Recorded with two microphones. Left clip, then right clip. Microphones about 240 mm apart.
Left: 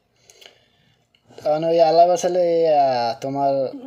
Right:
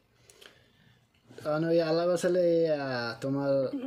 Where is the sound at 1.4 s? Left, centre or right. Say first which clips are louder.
Left 11 dB; centre.